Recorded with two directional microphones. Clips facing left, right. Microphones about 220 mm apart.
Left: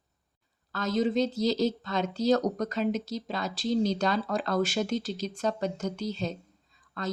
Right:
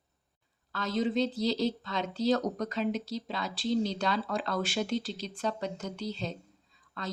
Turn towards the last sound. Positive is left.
turn(degrees=45)  # may be behind; listen again after turning